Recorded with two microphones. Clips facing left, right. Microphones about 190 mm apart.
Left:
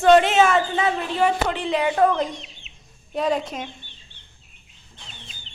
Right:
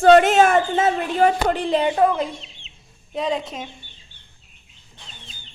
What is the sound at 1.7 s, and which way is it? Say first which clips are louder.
Speech: left 1 dB; 20° right (ahead or behind).